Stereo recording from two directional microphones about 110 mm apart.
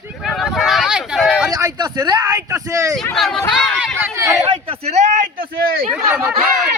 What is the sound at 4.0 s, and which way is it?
Speech, 25° right (ahead or behind).